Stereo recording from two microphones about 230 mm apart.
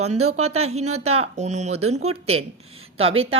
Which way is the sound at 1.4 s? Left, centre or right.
Right.